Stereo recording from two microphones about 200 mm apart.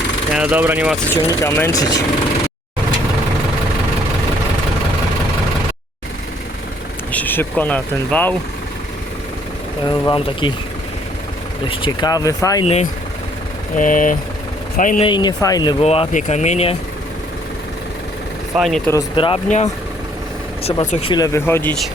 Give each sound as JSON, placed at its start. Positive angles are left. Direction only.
{"t": 0.3, "sound": "speech", "side_deg": -5}
{"t": 1.1, "sound": "speech", "side_deg": 15}
{"t": 7.1, "sound": "speech", "side_deg": 10}
{"t": 9.8, "sound": "speech", "side_deg": 25}
{"t": 11.7, "sound": "speech", "side_deg": 25}
{"t": 12.6, "sound": "speech", "side_deg": 30}
{"t": 15.0, "sound": "speech", "side_deg": 20}
{"t": 15.8, "sound": "speech", "side_deg": 30}
{"t": 18.5, "sound": "speech", "side_deg": 0}
{"t": 19.1, "sound": "speech", "side_deg": 25}
{"t": 19.5, "sound": "speech", "side_deg": 35}
{"t": 21.1, "sound": "speech", "side_deg": 20}